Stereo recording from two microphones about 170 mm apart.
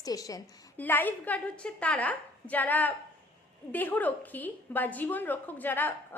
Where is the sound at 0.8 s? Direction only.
10° left (ahead or behind).